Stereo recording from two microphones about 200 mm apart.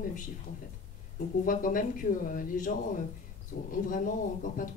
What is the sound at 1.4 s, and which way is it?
A woman's voice, 40° left (ahead or behind).